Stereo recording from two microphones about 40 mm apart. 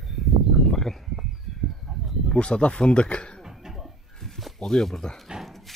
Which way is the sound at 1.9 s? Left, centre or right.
Centre.